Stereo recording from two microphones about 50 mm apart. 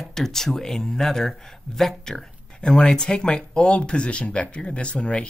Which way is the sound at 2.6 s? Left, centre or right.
Centre.